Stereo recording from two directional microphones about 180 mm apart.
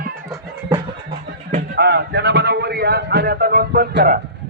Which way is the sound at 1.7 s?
65° right (ahead or behind).